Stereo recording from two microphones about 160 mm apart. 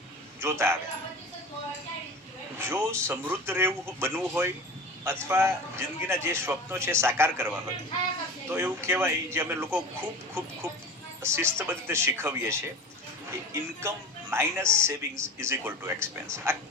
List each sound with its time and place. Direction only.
0.3 s a man's voice: 15° right (ahead or behind)
2.6 s speech: 15° right (ahead or behind)